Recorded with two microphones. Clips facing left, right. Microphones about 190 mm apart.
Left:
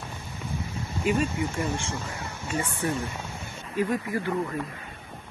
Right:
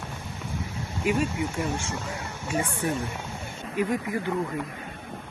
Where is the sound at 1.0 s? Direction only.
10° right (ahead or behind).